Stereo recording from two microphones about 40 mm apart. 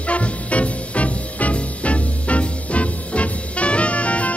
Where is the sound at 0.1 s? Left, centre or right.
Left.